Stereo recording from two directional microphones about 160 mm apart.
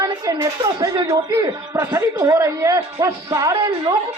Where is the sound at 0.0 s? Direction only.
25° right (ahead or behind).